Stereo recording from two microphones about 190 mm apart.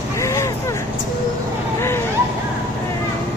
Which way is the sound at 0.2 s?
15° left (ahead or behind).